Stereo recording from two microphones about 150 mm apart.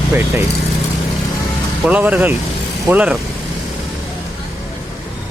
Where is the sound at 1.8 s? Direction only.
10° right (ahead or behind).